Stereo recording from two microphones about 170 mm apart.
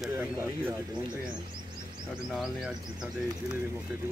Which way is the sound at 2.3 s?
5° right (ahead or behind).